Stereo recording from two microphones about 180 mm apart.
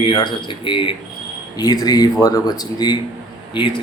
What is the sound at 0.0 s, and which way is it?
A man's voice, 25° left (ahead or behind).